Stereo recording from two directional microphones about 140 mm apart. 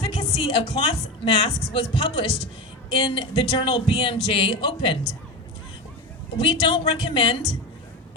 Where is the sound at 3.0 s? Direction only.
35° left (ahead or behind).